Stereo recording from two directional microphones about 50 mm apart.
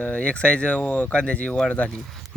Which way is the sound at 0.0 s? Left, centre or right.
Left.